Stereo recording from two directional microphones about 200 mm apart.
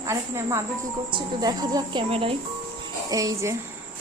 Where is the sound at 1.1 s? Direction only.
20° right (ahead or behind).